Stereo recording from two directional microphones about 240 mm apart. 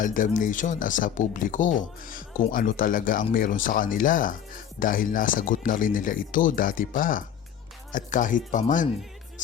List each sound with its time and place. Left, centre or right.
0.0 s speech: left